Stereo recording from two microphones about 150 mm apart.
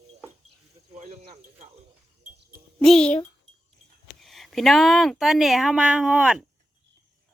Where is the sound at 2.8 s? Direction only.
5° left (ahead or behind).